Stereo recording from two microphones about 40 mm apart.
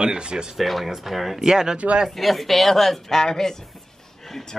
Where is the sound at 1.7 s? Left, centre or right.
Right.